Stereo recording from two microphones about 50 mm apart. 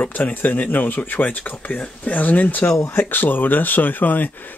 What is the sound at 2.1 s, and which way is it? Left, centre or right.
Speech, left.